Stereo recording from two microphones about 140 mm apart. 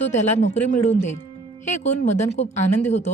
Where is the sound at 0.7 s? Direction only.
55° left (ahead or behind).